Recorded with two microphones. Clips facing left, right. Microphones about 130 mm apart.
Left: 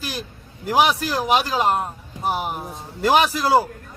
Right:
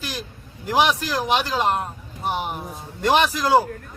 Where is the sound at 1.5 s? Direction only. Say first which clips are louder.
Left 2 dB; 5° left (ahead or behind).